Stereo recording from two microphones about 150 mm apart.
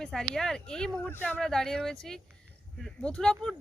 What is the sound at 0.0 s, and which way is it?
Speech, 5° left (ahead or behind).